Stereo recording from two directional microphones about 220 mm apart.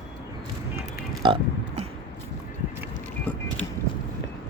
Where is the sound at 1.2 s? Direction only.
25° right (ahead or behind).